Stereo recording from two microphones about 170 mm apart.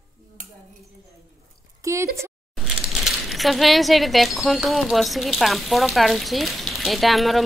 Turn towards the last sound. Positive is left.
turn(degrees=0)  # may be behind; listen again after turning